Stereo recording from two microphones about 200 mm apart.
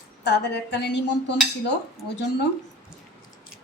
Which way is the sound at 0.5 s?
60° left (ahead or behind).